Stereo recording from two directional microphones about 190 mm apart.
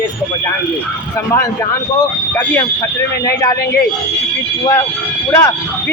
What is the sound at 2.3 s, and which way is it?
Speech, 10° left (ahead or behind).